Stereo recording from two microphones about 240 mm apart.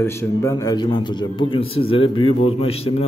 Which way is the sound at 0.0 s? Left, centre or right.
Centre.